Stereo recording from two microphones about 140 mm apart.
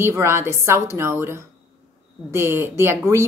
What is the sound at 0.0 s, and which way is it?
Speech, 20° right (ahead or behind).